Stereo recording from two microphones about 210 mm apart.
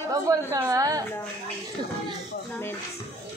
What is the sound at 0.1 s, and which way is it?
Speech, 15° right (ahead or behind).